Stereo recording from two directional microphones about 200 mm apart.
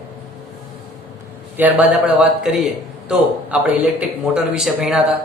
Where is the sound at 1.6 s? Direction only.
10° right (ahead or behind).